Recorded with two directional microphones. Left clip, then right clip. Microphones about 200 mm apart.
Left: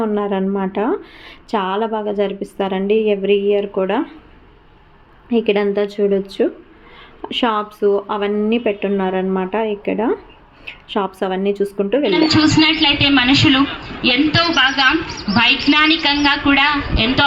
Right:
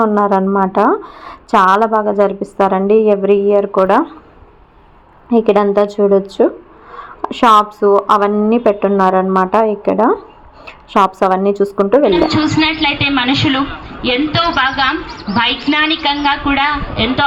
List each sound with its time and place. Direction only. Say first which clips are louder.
0.0 s speech: right 7 dB; 5° right (ahead or behind)
5.3 s a woman's voice: right 5 dB; 5° right (ahead or behind)
12.5 s a woman's voice: even; 15° left (ahead or behind)